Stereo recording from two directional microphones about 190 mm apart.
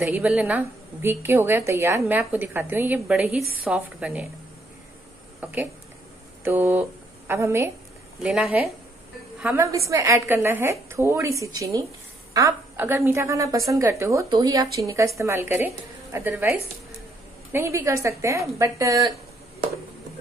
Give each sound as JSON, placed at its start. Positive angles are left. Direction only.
{"t": 0.0, "sound": "a woman's voice", "side_deg": -10}
{"t": 5.4, "sound": "a woman's voice", "side_deg": -10}